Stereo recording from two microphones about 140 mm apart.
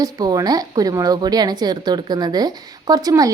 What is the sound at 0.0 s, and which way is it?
A woman's voice, 25° right (ahead or behind).